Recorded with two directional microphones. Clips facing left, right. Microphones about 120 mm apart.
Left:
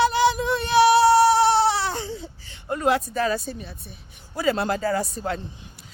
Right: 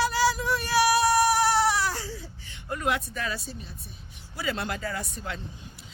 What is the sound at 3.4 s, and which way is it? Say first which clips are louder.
Speech: left 7 dB; 55° left (ahead or behind).